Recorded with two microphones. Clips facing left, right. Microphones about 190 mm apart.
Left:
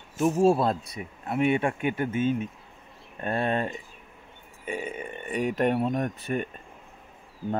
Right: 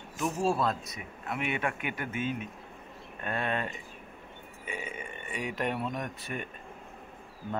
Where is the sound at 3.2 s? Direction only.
35° left (ahead or behind).